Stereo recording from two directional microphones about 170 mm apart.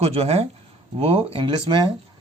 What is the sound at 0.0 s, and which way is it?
Speech, 35° right (ahead or behind).